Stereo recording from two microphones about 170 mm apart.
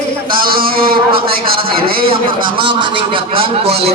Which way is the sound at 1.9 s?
60° right (ahead or behind).